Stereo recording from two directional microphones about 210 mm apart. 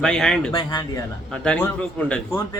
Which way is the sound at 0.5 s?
20° left (ahead or behind).